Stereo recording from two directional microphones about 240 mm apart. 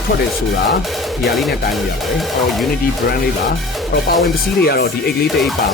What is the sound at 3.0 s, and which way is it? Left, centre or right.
Speech, left.